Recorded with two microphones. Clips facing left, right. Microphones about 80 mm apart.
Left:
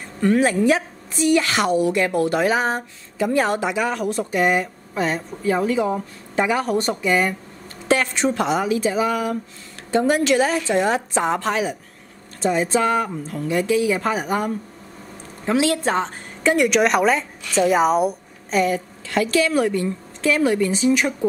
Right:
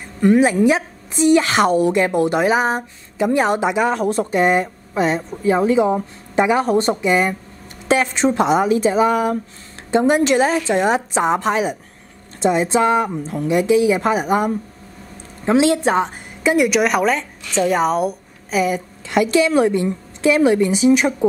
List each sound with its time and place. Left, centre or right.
0.2 s speech: centre; by 2.0 s right
2.0 s a woman's voice: right; by 18.8 s centre
19.0 s speech: centre